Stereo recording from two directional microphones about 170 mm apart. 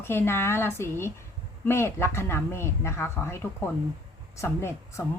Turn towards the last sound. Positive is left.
turn(degrees=15)  # may be behind; listen again after turning